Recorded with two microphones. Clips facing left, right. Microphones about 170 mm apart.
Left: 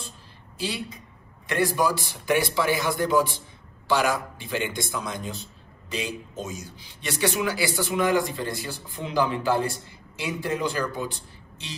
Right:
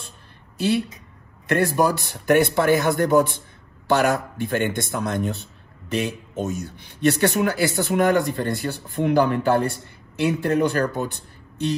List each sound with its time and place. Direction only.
0.6 s speech: 55° right (ahead or behind)